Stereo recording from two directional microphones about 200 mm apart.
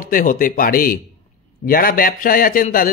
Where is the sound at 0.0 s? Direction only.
40° left (ahead or behind).